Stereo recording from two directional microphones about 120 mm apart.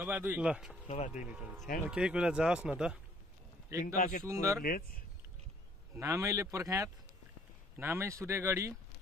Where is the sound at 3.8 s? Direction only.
90° left.